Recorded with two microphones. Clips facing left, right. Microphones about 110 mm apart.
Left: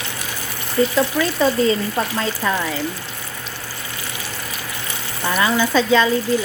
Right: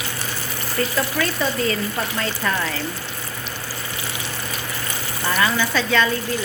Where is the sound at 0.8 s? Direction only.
10° left (ahead or behind).